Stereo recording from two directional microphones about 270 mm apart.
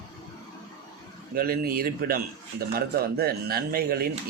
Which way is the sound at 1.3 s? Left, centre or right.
Right.